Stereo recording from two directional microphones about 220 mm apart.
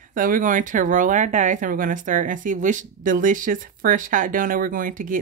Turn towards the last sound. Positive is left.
turn(degrees=-40)  # may be behind; listen again after turning